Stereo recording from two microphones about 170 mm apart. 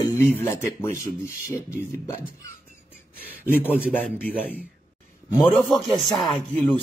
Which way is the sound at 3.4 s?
10° left (ahead or behind).